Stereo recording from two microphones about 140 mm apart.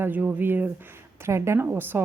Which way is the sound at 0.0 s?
10° right (ahead or behind).